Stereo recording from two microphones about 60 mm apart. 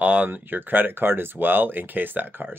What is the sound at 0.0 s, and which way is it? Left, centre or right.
Speech, right.